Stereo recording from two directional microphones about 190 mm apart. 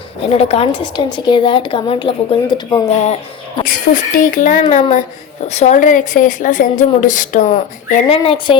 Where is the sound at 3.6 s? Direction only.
45° left (ahead or behind).